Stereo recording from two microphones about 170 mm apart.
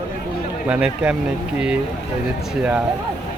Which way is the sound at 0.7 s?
10° right (ahead or behind).